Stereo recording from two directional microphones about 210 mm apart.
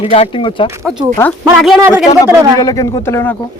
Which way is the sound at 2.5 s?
15° left (ahead or behind).